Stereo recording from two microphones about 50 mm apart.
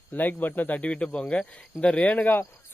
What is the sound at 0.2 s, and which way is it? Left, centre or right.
Speech, left.